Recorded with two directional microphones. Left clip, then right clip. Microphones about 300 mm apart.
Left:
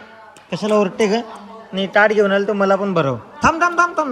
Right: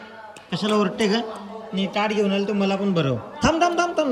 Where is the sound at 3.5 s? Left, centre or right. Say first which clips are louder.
Left 4 dB; centre.